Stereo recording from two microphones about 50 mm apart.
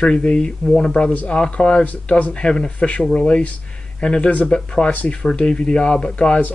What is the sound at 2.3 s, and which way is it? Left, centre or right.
Speech, centre.